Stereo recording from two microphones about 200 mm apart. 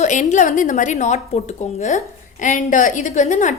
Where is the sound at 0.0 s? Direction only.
35° left (ahead or behind).